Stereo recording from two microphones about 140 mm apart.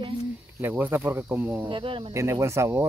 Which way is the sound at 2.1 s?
20° right (ahead or behind).